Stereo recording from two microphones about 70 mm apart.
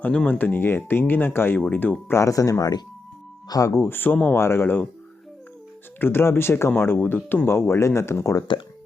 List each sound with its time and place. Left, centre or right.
0.0 s speech: centre
0.3 s speech: left
1.5 s speech: left
2.1 s speech: left
3.7 s speech: left
4.4 s speech: left
6.0 s speech: left